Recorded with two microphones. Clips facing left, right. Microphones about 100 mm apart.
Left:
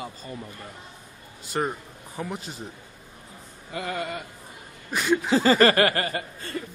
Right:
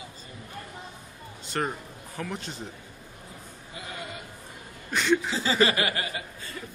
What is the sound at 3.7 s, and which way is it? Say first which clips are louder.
Speech: left 9 dB; 60° left (ahead or behind).